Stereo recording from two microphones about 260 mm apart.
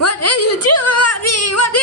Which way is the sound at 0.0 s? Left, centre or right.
Left.